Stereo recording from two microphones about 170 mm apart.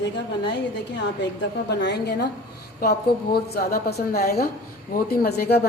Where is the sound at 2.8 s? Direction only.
65° left (ahead or behind).